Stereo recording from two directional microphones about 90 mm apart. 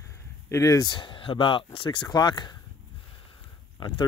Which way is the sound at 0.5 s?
35° left (ahead or behind).